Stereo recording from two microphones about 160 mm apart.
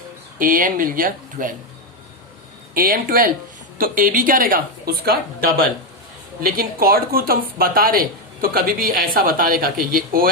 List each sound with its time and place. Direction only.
0.3 s speech: 60° right (ahead or behind)
2.7 s speech: 65° right (ahead or behind)